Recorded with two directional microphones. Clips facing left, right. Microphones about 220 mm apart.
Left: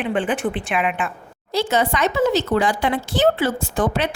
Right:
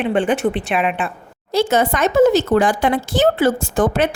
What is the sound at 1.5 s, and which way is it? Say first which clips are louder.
Speech: right 4 dB; 50° right (ahead or behind).